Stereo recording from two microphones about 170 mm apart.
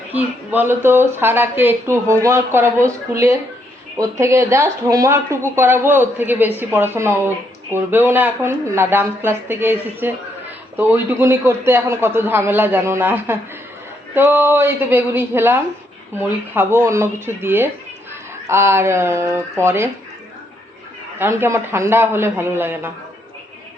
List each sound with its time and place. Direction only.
0.1 s speech: 10° right (ahead or behind)
21.2 s speech: 15° right (ahead or behind)